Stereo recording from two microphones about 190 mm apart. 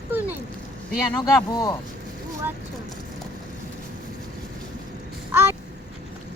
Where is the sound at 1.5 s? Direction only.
20° left (ahead or behind).